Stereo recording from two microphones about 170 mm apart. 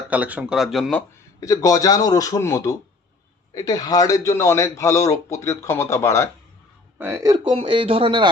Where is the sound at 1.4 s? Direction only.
20° left (ahead or behind).